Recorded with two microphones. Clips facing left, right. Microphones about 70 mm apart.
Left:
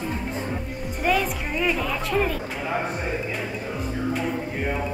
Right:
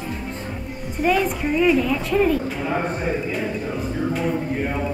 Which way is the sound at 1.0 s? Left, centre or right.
Centre.